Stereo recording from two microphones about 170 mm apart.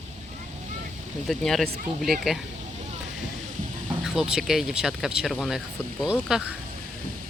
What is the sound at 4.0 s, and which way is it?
Speech, 5° right (ahead or behind).